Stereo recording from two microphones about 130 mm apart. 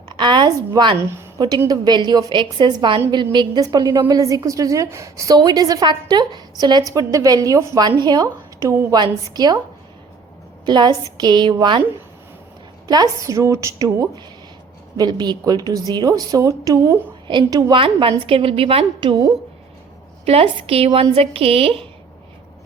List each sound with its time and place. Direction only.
0.1 s a woman's voice: 35° right (ahead or behind)
10.7 s a woman's voice: 35° right (ahead or behind)
12.9 s a woman's voice: 30° right (ahead or behind)
17.2 s a woman's voice: 35° right (ahead or behind)
20.2 s speech: 45° right (ahead or behind)